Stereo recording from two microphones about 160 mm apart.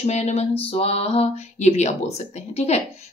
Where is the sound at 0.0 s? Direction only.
45° left (ahead or behind).